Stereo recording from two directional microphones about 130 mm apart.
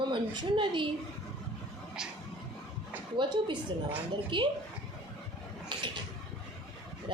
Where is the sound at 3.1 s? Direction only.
35° right (ahead or behind).